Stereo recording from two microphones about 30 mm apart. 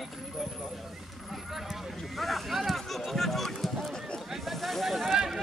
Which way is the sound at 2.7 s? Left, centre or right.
Centre.